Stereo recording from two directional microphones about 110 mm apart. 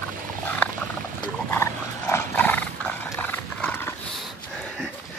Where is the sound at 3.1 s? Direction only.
15° left (ahead or behind).